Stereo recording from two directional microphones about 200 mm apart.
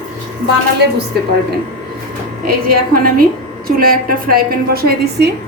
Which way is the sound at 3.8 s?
45° right (ahead or behind).